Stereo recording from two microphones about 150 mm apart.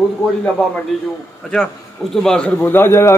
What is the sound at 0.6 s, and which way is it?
A man's voice, centre (ahead or behind).